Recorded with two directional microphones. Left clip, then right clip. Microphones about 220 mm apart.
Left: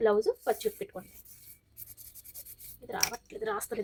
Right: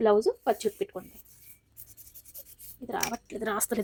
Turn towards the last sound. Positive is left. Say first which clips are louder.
# right 3 dB
turn(degrees=-55)  # may be behind; listen again after turning